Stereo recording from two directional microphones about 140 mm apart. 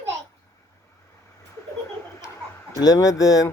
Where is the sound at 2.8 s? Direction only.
25° left (ahead or behind).